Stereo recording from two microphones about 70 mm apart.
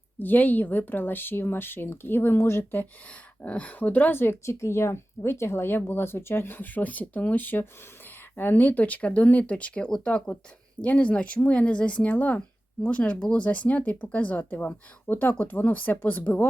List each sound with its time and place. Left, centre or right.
0.2 s speech: left
3.1 s speech: centre